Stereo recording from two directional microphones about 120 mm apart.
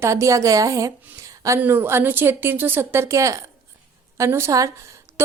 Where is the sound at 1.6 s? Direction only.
15° right (ahead or behind).